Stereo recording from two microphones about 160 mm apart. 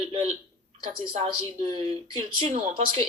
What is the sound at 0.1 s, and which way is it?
Speech, 40° right (ahead or behind).